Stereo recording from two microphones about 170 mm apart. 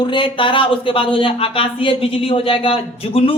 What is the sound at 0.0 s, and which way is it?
Speech, 30° left (ahead or behind).